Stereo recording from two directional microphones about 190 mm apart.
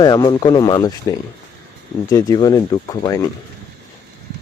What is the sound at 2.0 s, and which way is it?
Speech, 20° left (ahead or behind).